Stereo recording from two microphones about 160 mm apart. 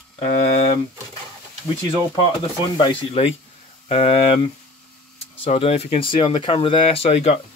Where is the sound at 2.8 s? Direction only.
35° left (ahead or behind).